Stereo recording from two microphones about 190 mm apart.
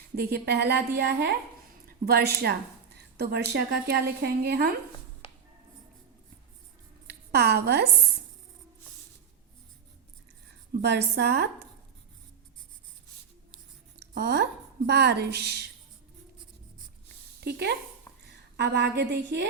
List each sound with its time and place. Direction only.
0.2 s a woman's voice: 55° right (ahead or behind)
7.1 s a woman's voice: 60° right (ahead or behind)
10.8 s a woman's voice: 60° right (ahead or behind)
14.1 s a woman's voice: 60° right (ahead or behind)
17.4 s a woman's voice: 60° right (ahead or behind)